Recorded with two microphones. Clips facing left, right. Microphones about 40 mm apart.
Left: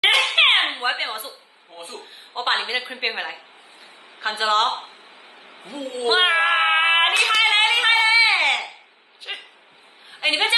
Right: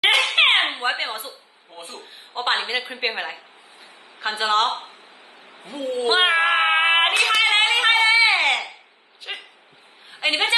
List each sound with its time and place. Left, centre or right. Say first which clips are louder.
0.0 s a sound: even; centre
0.7 s a woman's voice: even; centre
5.7 s a child's voice: right 4 dB; right
6.0 s child singing: left 1 dB; centre
7.3 s a sound: even; centre
8.3 s baby cry: even; centre
9.3 s dog: even; centre
10.2 s a woman's voice: left 1 dB; centre